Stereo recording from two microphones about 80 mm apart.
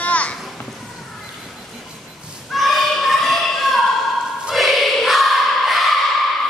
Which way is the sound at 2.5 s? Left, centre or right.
Centre.